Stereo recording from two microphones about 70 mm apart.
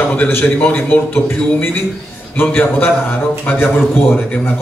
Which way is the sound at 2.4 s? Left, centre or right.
Left.